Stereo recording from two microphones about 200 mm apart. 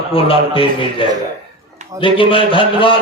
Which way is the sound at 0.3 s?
25° left (ahead or behind).